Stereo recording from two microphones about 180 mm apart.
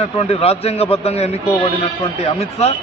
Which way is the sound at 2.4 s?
35° left (ahead or behind).